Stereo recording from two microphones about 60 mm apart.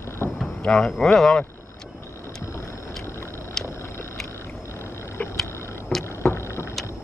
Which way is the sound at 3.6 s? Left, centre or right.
Left.